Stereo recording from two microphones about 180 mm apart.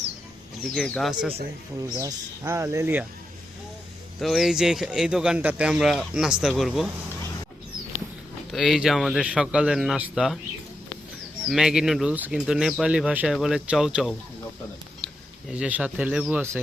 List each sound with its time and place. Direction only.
0.6 s speech: centre (ahead or behind)
2.0 s speech: 15° right (ahead or behind)
4.2 s speech: centre (ahead or behind)
8.5 s speech: centre (ahead or behind)
11.4 s speech: 5° right (ahead or behind)